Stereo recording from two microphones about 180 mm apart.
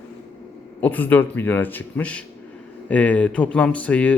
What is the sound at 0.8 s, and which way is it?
Speech, 10° left (ahead or behind).